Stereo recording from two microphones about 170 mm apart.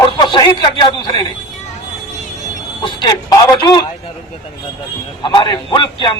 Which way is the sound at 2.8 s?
25° left (ahead or behind).